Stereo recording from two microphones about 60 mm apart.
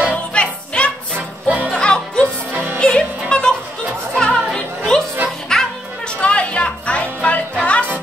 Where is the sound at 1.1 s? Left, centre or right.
Right.